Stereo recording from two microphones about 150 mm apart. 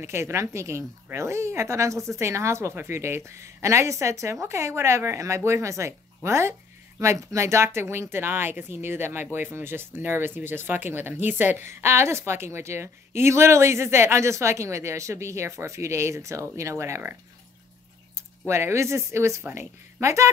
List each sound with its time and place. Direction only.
0.0 s a woman's voice: 20° right (ahead or behind)
18.5 s speech: 15° right (ahead or behind)